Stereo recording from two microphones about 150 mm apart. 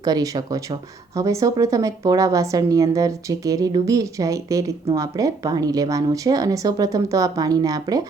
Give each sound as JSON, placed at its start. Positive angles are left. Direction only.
{"t": 0.0, "sound": "speech", "side_deg": -25}